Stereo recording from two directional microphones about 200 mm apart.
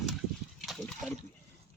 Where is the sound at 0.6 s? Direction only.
Centre (ahead or behind).